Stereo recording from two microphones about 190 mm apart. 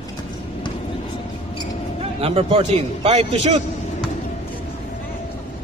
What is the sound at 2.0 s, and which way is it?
A man's voice, 30° right (ahead or behind).